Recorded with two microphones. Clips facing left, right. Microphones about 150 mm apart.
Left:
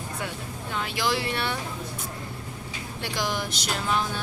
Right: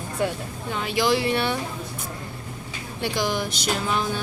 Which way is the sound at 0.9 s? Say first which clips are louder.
Right 7 dB; 20° right (ahead or behind).